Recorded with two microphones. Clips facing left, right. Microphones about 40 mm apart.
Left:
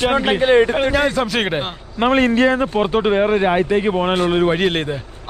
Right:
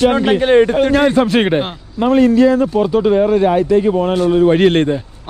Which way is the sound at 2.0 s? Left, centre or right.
Left.